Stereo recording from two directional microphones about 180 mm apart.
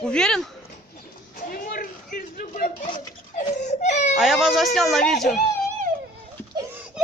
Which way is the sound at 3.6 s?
40° left (ahead or behind).